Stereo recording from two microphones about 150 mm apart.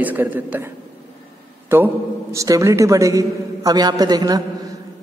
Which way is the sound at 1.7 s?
15° right (ahead or behind).